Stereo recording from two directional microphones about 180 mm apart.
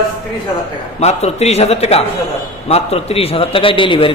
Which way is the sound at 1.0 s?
35° left (ahead or behind).